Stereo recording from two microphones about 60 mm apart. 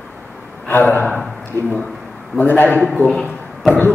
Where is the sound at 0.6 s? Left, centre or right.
Left.